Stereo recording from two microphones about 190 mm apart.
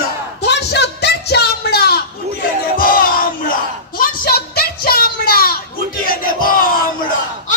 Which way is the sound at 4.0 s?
55° left (ahead or behind).